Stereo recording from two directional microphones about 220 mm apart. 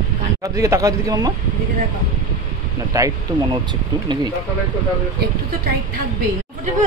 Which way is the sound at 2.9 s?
15° right (ahead or behind).